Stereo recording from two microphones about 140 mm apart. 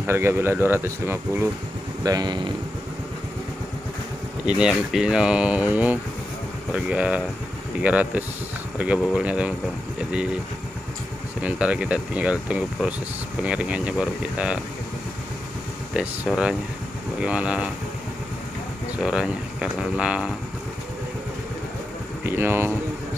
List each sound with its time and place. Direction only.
0.0 s speech: 15° right (ahead or behind)
2.0 s speech: 30° right (ahead or behind)
4.5 s speech: 5° right (ahead or behind)
11.4 s speech: 10° right (ahead or behind)
16.3 s speech: centre (ahead or behind)
18.9 s speech: 5° right (ahead or behind)
22.2 s speech: 15° right (ahead or behind)